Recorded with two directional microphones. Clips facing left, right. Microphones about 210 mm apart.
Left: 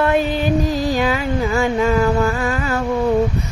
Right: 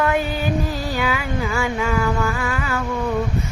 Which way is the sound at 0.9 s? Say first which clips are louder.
Left 4 dB; 40° left (ahead or behind).